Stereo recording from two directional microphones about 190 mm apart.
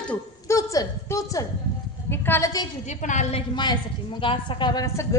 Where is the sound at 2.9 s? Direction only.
40° left (ahead or behind).